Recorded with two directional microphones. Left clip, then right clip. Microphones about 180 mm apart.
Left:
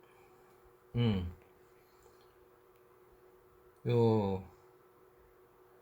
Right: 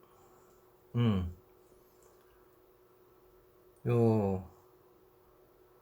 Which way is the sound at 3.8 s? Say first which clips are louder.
Even; 15° right (ahead or behind).